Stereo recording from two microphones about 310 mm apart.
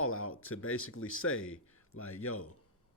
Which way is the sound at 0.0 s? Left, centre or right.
Left.